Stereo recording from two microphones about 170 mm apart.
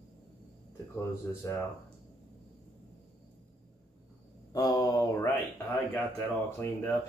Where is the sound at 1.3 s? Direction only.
15° left (ahead or behind).